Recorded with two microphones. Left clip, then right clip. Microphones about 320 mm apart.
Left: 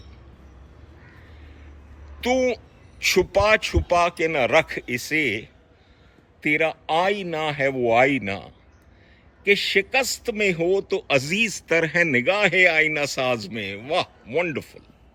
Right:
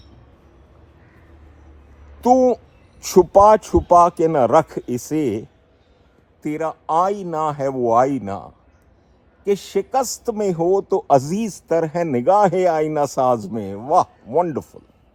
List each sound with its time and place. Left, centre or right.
2.2 s a man's voice: centre
6.5 s a man's voice: centre
7.8 s speech: right
8.2 s a man's voice: centre